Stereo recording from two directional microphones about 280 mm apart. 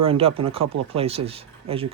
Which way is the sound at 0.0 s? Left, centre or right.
Centre.